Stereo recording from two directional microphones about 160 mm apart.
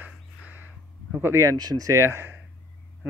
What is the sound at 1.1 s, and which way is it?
A man's voice, 15° right (ahead or behind).